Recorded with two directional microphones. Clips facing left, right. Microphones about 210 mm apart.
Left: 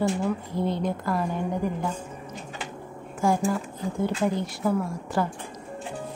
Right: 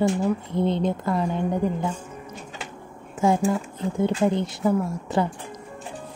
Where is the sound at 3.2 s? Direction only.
20° right (ahead or behind).